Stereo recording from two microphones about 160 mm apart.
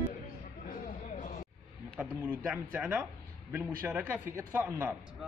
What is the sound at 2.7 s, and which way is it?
Speech, 10° right (ahead or behind).